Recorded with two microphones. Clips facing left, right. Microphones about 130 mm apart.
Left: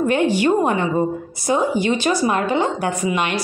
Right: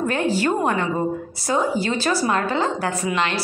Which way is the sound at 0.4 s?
20° left (ahead or behind).